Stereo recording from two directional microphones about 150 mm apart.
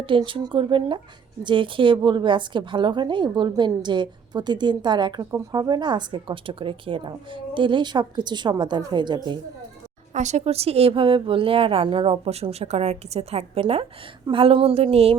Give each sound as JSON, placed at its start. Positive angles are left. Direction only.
{"t": 0.0, "sound": "speech", "side_deg": -35}
{"t": 10.2, "sound": "speech", "side_deg": -50}